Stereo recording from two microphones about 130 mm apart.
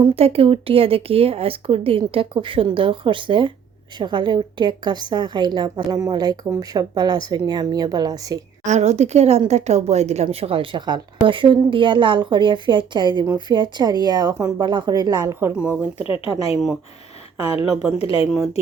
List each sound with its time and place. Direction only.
0.0 s a woman's voice: 50° right (ahead or behind); by 8.4 s 30° right (ahead or behind)
8.6 s a woman's voice: 65° right (ahead or behind)
10.2 s a woman's voice: 45° right (ahead or behind)
15.5 s speech: 10° right (ahead or behind)
16.0 s speech: 45° left (ahead or behind)
17.9 s speech: 45° left (ahead or behind)